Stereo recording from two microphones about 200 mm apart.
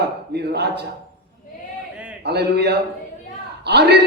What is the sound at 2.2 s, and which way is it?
A man's voice, 55° right (ahead or behind).